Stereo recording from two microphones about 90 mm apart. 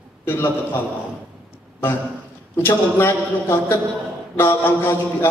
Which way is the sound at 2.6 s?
25° left (ahead or behind).